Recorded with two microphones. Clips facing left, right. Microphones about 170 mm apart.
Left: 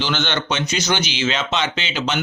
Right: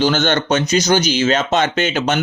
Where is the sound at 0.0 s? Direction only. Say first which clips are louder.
Right 7 dB; 45° right (ahead or behind).